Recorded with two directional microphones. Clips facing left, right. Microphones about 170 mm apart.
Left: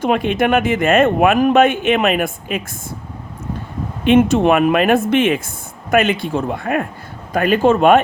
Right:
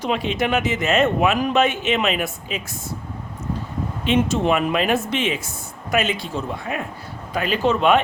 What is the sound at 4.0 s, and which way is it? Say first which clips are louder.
Speech: left 8 dB; 55° left (ahead or behind).